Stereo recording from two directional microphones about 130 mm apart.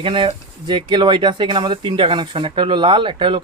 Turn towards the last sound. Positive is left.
turn(degrees=-40)  # may be behind; listen again after turning